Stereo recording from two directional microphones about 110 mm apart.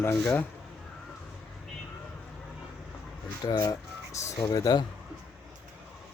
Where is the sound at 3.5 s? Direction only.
35° left (ahead or behind).